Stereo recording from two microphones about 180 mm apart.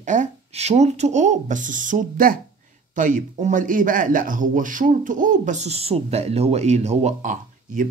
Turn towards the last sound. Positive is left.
turn(degrees=-45)  # may be behind; listen again after turning